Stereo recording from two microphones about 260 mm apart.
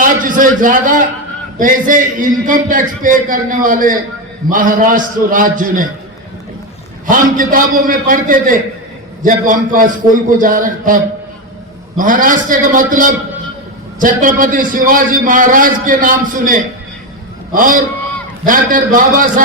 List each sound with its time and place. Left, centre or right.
0.0 s a man's voice: right
7.1 s a man's voice: right